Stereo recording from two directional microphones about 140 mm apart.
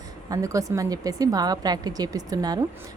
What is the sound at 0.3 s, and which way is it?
Speech, 25° right (ahead or behind).